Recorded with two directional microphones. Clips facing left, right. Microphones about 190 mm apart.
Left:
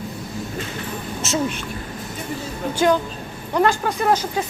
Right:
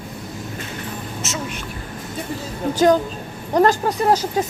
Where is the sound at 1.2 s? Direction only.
30° left (ahead or behind).